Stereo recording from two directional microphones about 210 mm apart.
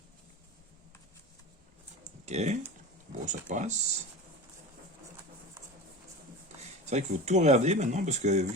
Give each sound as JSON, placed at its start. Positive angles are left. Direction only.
{"t": 2.2, "sound": "speech", "side_deg": -30}
{"t": 6.8, "sound": "speech", "side_deg": -35}